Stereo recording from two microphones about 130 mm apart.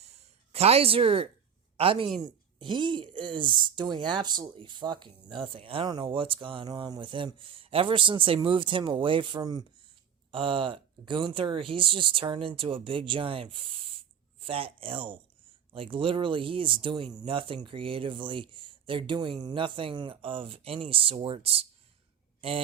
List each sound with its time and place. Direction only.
0.5 s speech: 50° right (ahead or behind)